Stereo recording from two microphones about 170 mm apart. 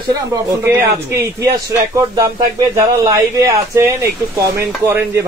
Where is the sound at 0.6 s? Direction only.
15° right (ahead or behind).